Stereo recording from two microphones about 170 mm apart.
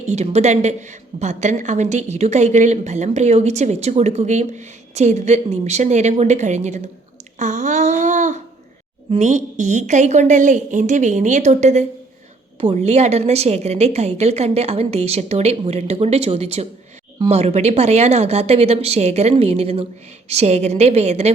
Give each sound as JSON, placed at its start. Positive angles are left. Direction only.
{"t": 0.1, "sound": "a woman's voice", "side_deg": -40}
{"t": 7.3, "sound": "a sound", "side_deg": -45}
{"t": 9.1, "sound": "a woman's voice", "side_deg": -45}